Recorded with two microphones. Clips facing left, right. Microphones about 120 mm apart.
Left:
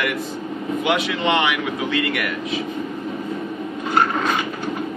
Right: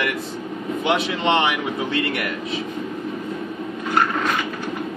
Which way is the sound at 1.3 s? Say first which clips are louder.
Right 1 dB; 30° right (ahead or behind).